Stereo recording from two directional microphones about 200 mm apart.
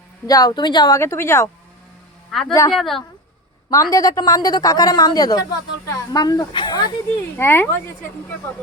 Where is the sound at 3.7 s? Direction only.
15° left (ahead or behind).